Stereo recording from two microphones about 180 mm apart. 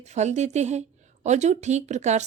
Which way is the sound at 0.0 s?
40° right (ahead or behind).